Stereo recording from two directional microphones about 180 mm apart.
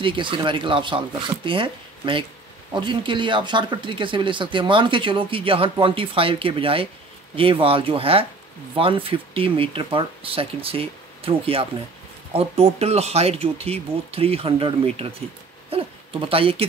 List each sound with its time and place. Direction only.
0.0 s speech: 25° right (ahead or behind)